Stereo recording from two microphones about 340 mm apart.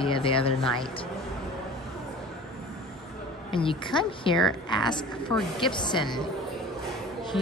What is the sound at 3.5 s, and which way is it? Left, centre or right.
A woman's voice, centre.